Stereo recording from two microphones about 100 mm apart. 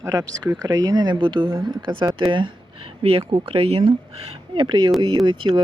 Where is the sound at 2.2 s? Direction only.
50° right (ahead or behind); by 3.2 s 70° right (ahead or behind).